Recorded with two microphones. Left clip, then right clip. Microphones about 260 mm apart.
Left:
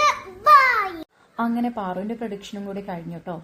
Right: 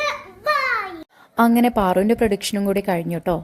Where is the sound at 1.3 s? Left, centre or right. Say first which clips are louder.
Right 9 dB; right.